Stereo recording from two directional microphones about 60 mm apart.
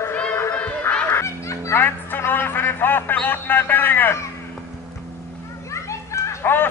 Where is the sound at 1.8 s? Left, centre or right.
Left.